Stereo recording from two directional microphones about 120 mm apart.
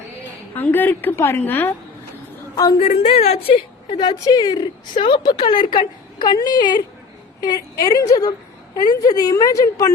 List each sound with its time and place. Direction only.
0.5 s a woman's voice: 15° left (ahead or behind)
2.7 s a woman's voice: 60° left (ahead or behind); by 9.8 s 30° left (ahead or behind)